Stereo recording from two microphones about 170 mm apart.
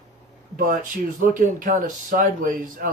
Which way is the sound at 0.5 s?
55° right (ahead or behind).